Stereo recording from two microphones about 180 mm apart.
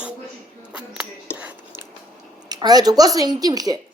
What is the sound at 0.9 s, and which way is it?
Whispering, 5° right (ahead or behind).